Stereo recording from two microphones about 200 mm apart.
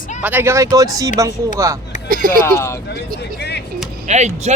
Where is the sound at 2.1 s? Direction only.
45° right (ahead or behind).